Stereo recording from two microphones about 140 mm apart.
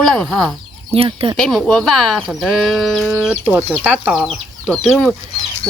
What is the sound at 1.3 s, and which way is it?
Speech, centre (ahead or behind).